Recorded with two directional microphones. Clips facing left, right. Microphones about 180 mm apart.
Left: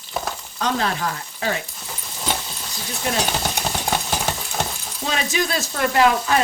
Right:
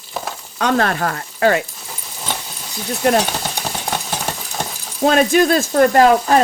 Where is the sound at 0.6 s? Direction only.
65° right (ahead or behind).